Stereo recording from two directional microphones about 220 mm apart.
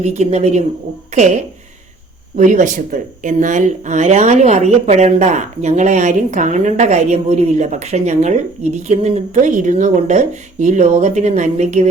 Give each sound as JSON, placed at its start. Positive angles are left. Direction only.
{"t": 0.0, "sound": "speech", "side_deg": -30}